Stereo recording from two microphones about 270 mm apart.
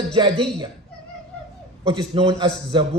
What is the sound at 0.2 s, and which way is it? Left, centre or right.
Speech, centre.